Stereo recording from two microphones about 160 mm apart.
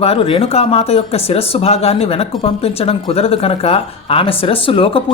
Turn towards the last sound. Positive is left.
turn(degrees=35)  # may be behind; listen again after turning